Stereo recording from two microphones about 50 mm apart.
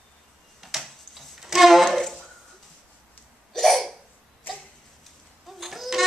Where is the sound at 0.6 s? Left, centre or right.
Centre.